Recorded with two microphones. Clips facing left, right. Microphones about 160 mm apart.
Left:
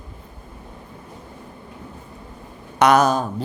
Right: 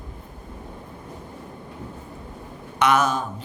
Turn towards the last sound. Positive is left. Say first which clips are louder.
# left 5 dB
turn(degrees=35)  # may be behind; listen again after turning